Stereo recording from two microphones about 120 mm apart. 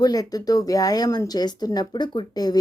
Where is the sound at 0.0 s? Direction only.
30° left (ahead or behind).